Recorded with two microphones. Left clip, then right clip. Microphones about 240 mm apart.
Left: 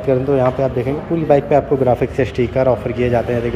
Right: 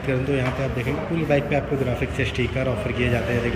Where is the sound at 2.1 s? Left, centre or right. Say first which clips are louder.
Left 8 dB; centre.